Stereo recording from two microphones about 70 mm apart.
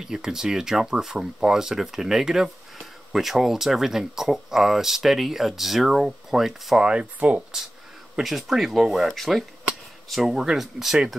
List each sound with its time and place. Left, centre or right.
0.0 s speech: centre
6.8 s speech: centre
8.2 s speech: centre